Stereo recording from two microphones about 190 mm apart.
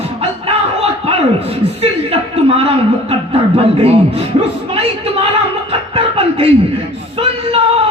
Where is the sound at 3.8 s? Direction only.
30° right (ahead or behind).